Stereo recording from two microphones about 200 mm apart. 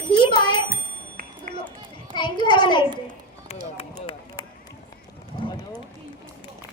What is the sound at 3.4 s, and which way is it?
Run, 30° left (ahead or behind).